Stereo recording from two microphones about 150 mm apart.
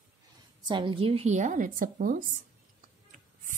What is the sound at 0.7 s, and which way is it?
A woman's voice, 35° right (ahead or behind).